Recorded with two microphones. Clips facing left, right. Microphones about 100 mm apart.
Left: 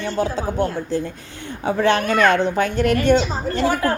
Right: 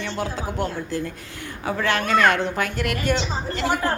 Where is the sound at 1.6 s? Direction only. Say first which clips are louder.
Left 5 dB; 20° left (ahead or behind).